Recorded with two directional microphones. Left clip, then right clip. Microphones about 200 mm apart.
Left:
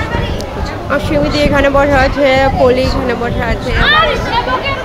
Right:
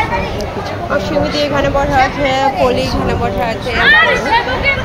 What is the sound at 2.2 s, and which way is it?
Speech, 30° left (ahead or behind).